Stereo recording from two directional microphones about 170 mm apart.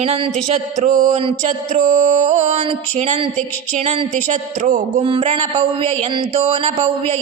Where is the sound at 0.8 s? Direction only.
45° right (ahead or behind).